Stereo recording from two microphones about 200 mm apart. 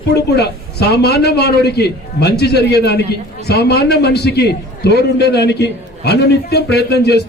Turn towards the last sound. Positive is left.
turn(degrees=55)  # may be behind; listen again after turning